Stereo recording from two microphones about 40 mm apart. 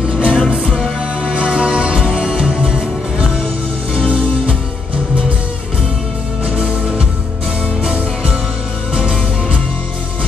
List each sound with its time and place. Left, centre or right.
0.1 s music: right
6.5 s music: right